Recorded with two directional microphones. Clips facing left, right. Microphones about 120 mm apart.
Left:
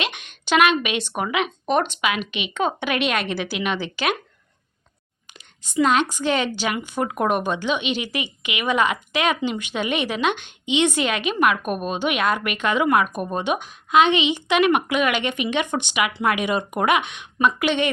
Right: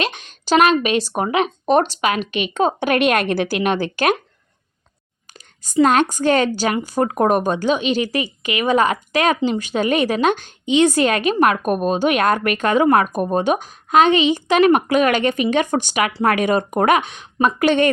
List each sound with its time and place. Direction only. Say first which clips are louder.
0.0 s a woman's voice: right 5 dB; 35° right (ahead or behind)
5.6 s a woman's voice: right 4 dB; 40° right (ahead or behind)